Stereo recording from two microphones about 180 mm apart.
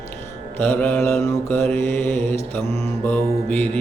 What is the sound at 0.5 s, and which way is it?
Mantra, 10° left (ahead or behind).